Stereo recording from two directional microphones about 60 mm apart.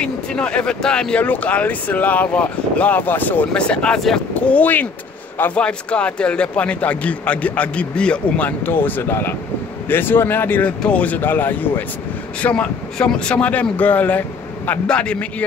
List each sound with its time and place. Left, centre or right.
0.0 s speech: centre
1.2 s speech: left
3.5 s speech: centre
8.5 s speech: left
10.8 s speech: left
12.4 s speech: left